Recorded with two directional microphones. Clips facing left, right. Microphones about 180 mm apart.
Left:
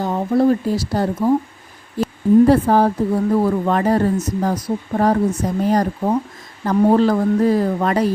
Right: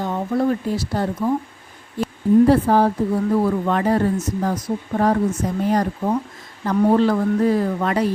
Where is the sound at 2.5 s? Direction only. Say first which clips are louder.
Left 2 dB; 40° left (ahead or behind).